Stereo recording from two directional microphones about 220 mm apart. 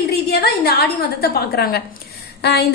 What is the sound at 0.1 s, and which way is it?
A woman's voice, 45° left (ahead or behind).